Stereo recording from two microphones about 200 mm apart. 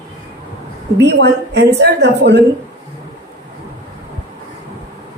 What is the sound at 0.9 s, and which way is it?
A woman's voice, 60° right (ahead or behind).